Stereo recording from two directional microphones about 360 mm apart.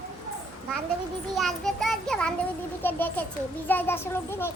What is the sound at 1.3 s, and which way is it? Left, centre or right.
A child's voice, centre.